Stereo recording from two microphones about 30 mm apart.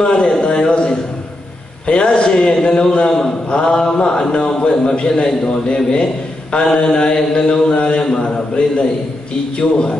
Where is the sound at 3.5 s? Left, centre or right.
Left.